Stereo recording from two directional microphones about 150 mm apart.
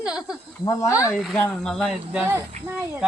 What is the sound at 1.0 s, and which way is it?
Speech, centre (ahead or behind).